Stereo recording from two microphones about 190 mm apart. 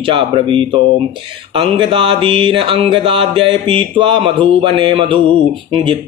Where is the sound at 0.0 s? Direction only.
25° right (ahead or behind).